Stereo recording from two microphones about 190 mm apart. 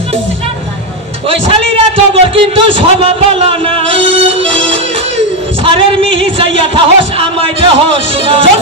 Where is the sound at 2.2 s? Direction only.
30° right (ahead or behind).